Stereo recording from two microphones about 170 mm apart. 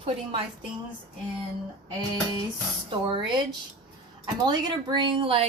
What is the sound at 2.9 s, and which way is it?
Speech, 25° right (ahead or behind).